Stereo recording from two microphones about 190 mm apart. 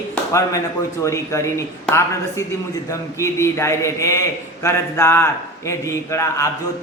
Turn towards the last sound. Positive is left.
turn(degrees=15)  # may be behind; listen again after turning